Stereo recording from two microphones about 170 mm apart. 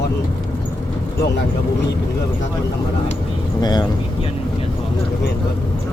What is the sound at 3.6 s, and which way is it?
Speech, 25° left (ahead or behind).